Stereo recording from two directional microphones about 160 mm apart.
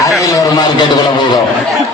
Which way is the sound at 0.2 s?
20° left (ahead or behind).